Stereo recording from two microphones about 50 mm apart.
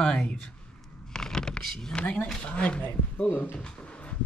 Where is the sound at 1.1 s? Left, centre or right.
Centre.